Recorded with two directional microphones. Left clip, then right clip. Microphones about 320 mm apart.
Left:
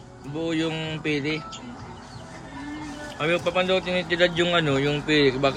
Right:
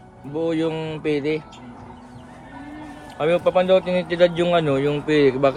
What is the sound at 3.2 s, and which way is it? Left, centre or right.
Speech, centre.